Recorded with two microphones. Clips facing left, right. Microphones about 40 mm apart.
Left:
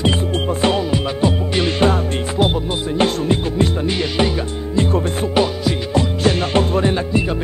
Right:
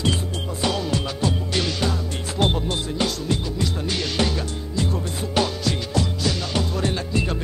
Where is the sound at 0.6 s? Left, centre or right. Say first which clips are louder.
Left 6 dB; left.